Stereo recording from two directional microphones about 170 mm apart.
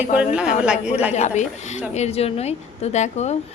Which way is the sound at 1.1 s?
40° left (ahead or behind).